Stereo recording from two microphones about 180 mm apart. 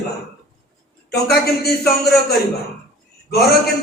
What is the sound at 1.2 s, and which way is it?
Speech, 60° left (ahead or behind).